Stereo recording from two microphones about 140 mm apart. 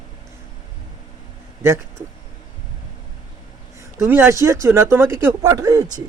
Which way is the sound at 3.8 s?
20° right (ahead or behind).